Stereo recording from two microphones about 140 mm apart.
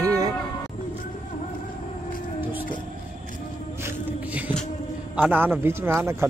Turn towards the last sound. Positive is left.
turn(degrees=-15)  # may be behind; listen again after turning